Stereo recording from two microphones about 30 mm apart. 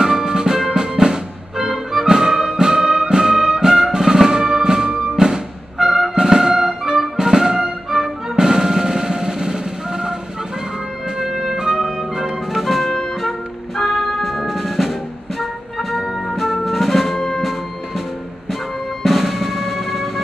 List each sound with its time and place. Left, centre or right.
0.0 s music: right
11.1 s music: right
12.5 s music: centre
13.9 s music: centre
16.3 s music: centre
19.0 s music: centre